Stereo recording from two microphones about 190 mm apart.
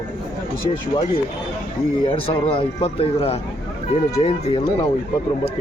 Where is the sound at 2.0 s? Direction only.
30° left (ahead or behind).